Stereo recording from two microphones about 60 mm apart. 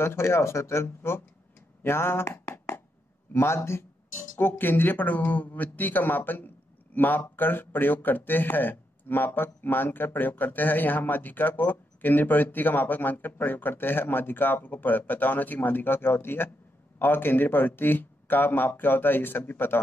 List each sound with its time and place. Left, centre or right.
0.0 s speech: left
1.8 s a sound: left
3.3 s speech: left